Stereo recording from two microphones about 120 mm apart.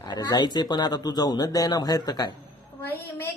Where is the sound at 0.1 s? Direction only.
35° left (ahead or behind).